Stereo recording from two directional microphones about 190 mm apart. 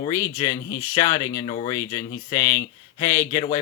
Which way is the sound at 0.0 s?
15° left (ahead or behind).